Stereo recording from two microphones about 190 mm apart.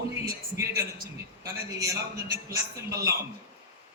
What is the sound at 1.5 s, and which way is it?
A man's voice, 15° right (ahead or behind).